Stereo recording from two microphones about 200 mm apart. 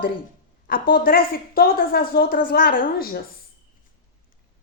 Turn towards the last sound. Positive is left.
turn(degrees=50)  # may be behind; listen again after turning